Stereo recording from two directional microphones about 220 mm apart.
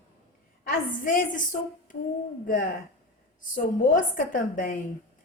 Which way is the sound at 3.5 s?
35° left (ahead or behind).